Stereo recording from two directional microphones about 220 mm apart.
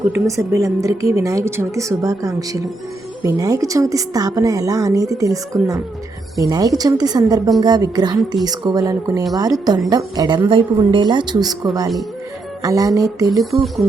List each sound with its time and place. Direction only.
0.1 s a woman's voice: 15° right (ahead or behind)
6.5 s a woman's voice: 15° right (ahead or behind)
13.4 s speech: centre (ahead or behind)